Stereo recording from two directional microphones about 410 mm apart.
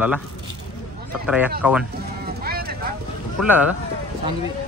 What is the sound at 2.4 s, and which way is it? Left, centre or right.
Clip-clop, right.